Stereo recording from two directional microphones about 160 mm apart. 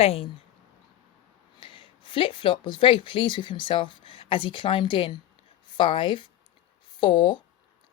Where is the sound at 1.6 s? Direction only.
30° left (ahead or behind).